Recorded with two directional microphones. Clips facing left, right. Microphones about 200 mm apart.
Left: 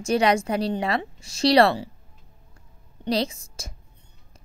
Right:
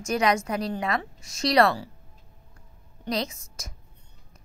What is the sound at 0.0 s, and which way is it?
Speech, 30° left (ahead or behind).